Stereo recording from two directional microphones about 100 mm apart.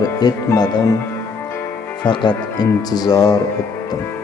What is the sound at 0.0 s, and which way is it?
Speech, 40° left (ahead or behind).